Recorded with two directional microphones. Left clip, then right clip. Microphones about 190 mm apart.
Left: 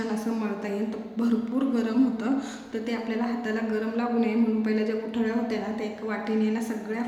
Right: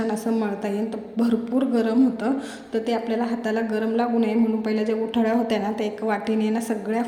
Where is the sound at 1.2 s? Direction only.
30° right (ahead or behind).